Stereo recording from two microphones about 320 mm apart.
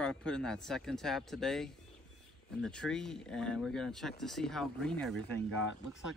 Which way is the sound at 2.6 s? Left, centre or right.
Centre.